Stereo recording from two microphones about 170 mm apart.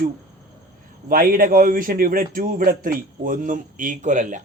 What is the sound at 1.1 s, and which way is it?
A man's voice, 55° right (ahead or behind).